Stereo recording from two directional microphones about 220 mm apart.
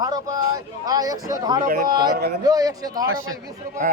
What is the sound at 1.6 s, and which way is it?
Speech, 40° right (ahead or behind).